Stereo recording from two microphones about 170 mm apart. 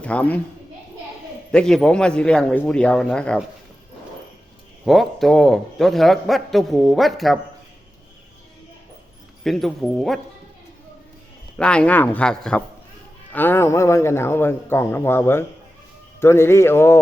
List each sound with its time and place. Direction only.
0.0 s a woman's voice: 5° left (ahead or behind)
1.5 s a man's voice: centre (ahead or behind)
4.9 s a man's voice: centre (ahead or behind)
9.4 s a man's voice: centre (ahead or behind)
11.5 s a man's voice: 5° left (ahead or behind)